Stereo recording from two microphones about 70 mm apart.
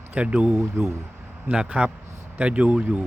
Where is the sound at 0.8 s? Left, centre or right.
Right.